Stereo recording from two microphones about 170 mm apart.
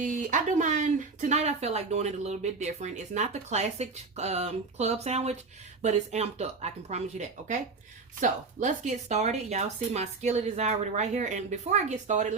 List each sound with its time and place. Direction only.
0.0 s speech: 50° right (ahead or behind)